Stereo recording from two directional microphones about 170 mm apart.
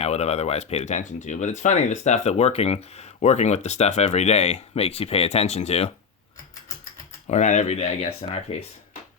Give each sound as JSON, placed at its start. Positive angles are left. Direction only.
{"t": 0.0, "sound": "speech", "side_deg": 40}
{"t": 7.3, "sound": "speech", "side_deg": 45}